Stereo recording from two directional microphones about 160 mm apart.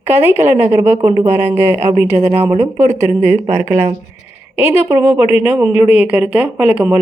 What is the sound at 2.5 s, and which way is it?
Speech, 45° right (ahead or behind).